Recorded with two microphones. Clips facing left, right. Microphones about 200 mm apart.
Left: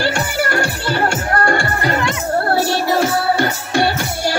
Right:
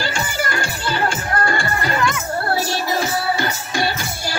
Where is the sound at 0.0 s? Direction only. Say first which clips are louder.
Left 5 dB; 65° left (ahead or behind).